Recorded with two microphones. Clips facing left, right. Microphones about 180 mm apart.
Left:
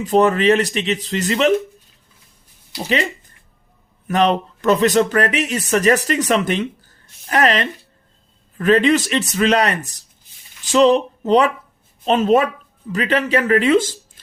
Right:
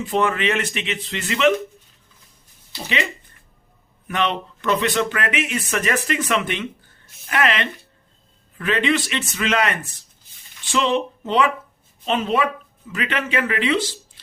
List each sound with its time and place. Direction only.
0.0 s speech: 40° left (ahead or behind)
2.7 s speech: 40° left (ahead or behind)
4.1 s speech: 40° left (ahead or behind)